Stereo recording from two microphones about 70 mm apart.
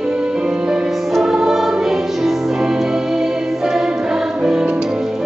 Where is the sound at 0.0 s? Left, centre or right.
Centre.